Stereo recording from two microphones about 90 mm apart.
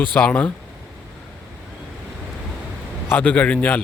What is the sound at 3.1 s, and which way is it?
Speech, 20° left (ahead or behind).